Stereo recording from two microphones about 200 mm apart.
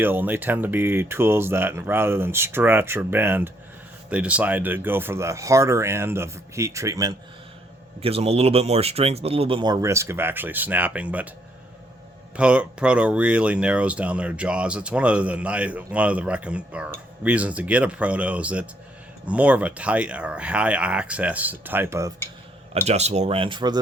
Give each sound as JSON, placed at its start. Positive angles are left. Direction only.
{"t": 0.0, "sound": "speech", "side_deg": -10}
{"t": 8.0, "sound": "speech", "side_deg": -30}
{"t": 12.4, "sound": "speech", "side_deg": -5}
{"t": 22.9, "sound": "speech", "side_deg": -35}